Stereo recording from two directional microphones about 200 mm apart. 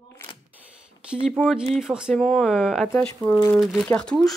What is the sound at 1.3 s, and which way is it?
Speech, centre (ahead or behind).